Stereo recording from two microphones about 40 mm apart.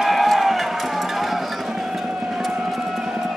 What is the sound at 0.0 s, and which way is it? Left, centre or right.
Music, centre.